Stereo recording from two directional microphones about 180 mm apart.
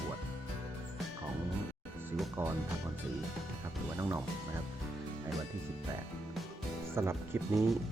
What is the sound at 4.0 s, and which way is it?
Speech, 15° right (ahead or behind).